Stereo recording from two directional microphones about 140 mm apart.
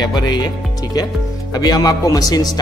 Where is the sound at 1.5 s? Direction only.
30° left (ahead or behind).